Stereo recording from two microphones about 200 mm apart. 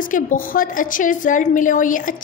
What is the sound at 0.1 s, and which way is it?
A woman's voice, 45° left (ahead or behind).